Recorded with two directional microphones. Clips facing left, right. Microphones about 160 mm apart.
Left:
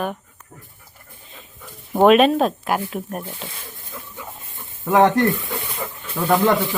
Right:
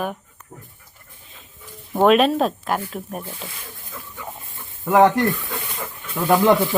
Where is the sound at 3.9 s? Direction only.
20° left (ahead or behind).